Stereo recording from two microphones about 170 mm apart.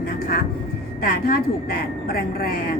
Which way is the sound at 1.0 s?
60° left (ahead or behind).